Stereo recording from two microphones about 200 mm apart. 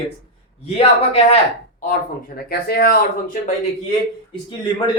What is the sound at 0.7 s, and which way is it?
Speech, 30° left (ahead or behind).